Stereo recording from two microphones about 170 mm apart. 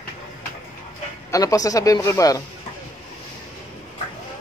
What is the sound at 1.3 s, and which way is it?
A man's voice, 20° left (ahead or behind).